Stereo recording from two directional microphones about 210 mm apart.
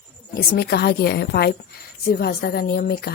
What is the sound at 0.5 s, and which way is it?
A woman's voice, 50° left (ahead or behind).